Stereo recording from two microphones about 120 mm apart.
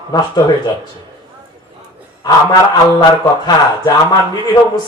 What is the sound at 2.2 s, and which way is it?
Speech, 35° left (ahead or behind).